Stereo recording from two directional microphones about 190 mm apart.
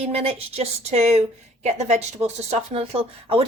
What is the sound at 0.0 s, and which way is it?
Speech, 30° right (ahead or behind).